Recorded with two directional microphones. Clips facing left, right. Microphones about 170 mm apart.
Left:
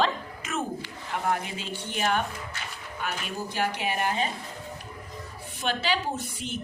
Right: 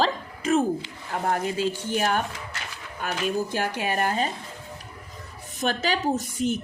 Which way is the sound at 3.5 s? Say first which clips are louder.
Right 2 dB; 45° right (ahead or behind).